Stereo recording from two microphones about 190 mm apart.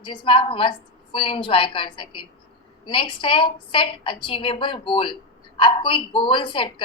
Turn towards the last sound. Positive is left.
turn(degrees=25)  # may be behind; listen again after turning